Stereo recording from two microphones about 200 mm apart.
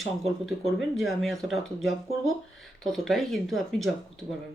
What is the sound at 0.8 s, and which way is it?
A woman's voice, centre (ahead or behind).